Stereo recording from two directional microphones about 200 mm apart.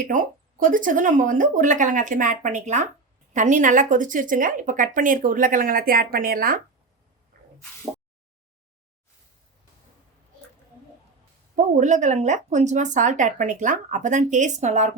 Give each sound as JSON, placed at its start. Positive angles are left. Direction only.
{"t": 0.0, "sound": "a woman's voice", "side_deg": -45}
{"t": 7.3, "sound": "spray", "side_deg": -45}
{"t": 11.5, "sound": "a woman's voice", "side_deg": -40}